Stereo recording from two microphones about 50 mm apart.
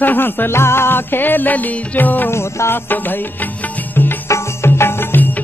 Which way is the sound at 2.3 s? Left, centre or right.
Left.